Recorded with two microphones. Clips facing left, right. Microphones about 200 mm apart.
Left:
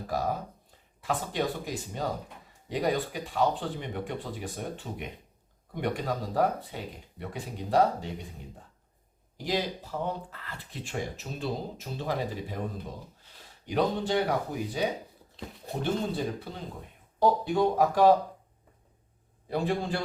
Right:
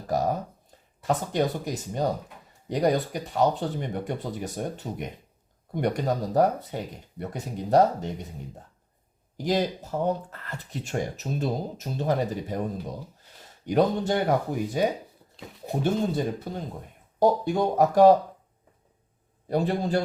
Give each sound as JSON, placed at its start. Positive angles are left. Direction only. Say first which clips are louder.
{"t": 1.0, "sound": "speech", "louder": "right 5 dB", "side_deg": -40}
{"t": 9.4, "sound": "speech", "louder": "right 5 dB", "side_deg": -45}
{"t": 13.7, "sound": "speech", "louder": "right 5 dB", "side_deg": -45}
{"t": 15.8, "sound": "speech", "louder": "right 4 dB", "side_deg": -45}
{"t": 19.5, "sound": "speech", "louder": "right 4 dB", "side_deg": -40}